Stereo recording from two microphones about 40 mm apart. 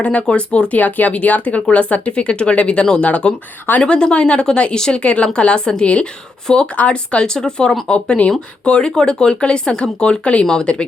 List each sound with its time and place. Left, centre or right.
0.0 s speech: left
0.8 s speech: left
6.7 s speech: left; by 7.8 s centre
7.9 s speech: left